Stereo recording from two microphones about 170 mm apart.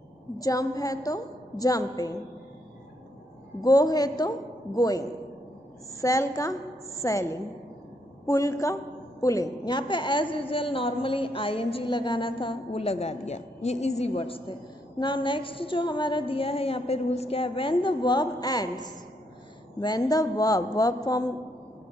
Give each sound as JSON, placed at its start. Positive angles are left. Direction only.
{"t": 0.4, "sound": "a woman's voice", "side_deg": 20}
{"t": 3.6, "sound": "a woman's voice", "side_deg": 20}
{"t": 10.3, "sound": "a sound", "side_deg": 30}
{"t": 15.0, "sound": "a woman's voice", "side_deg": 30}
{"t": 20.1, "sound": "a woman's voice", "side_deg": 20}